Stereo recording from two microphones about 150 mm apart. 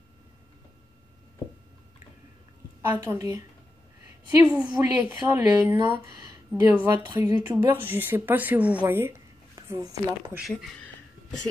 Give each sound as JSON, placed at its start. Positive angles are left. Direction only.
{"t": 2.9, "sound": "a woman's voice", "side_deg": -15}
{"t": 4.5, "sound": "a woman's voice", "side_deg": -10}